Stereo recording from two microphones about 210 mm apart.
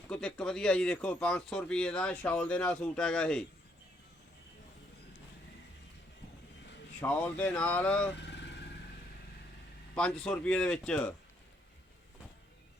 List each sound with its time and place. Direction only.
0.1 s speech: 5° left (ahead or behind)
7.0 s speech: 5° left (ahead or behind)
8.1 s vehicle: 55° left (ahead or behind)
9.9 s speech: 5° left (ahead or behind)